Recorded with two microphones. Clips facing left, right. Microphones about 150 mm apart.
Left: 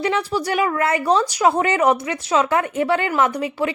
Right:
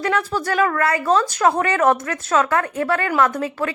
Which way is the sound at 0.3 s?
15° left (ahead or behind).